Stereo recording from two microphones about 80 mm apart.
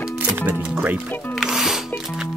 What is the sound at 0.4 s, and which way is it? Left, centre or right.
Speech, right.